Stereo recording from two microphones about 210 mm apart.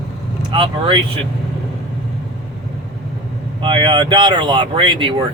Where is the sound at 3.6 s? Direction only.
25° right (ahead or behind).